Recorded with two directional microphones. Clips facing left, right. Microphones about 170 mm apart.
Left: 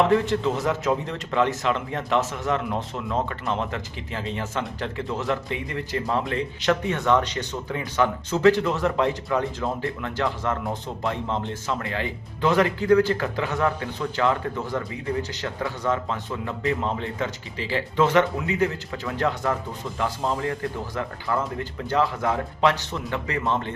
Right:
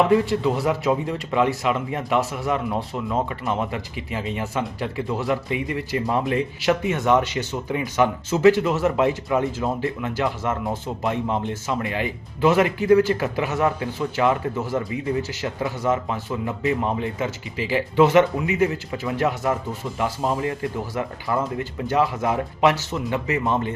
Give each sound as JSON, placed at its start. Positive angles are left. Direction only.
{"t": 0.7, "sound": "speech", "side_deg": -10}